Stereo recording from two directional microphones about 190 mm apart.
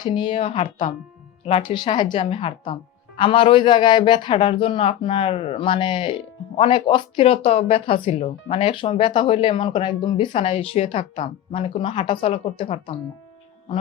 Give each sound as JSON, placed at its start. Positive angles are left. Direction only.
{"t": 0.0, "sound": "a woman's voice", "side_deg": 25}